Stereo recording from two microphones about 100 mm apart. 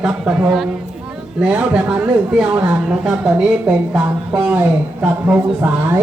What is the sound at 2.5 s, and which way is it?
Speech, 35° right (ahead or behind).